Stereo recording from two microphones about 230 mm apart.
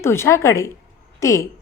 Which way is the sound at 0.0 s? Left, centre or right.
Centre.